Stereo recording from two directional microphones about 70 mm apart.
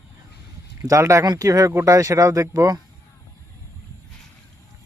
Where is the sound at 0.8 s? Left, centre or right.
Right.